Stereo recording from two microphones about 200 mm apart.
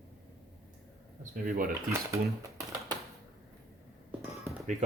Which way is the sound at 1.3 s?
45° right (ahead or behind).